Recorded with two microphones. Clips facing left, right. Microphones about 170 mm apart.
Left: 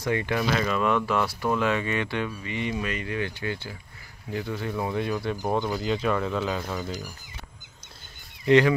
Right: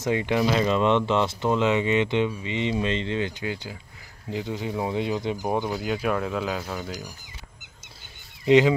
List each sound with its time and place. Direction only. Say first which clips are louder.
0.0 s speech: right 3 dB; 20° right (ahead or behind)
8.5 s speech: right 1 dB; 15° right (ahead or behind)